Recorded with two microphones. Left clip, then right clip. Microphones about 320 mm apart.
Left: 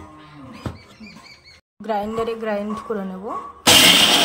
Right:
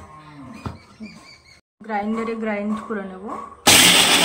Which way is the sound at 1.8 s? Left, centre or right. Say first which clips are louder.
Left 2 dB; left.